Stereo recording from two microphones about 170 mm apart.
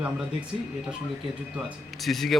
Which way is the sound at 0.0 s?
5° right (ahead or behind).